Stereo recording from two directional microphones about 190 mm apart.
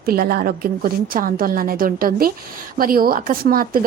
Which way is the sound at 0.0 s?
50° right (ahead or behind).